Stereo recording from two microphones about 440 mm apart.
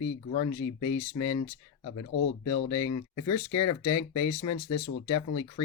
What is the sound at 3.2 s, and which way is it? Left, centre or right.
Speech, left.